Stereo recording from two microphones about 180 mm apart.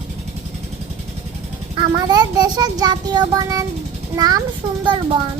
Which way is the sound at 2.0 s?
20° right (ahead or behind).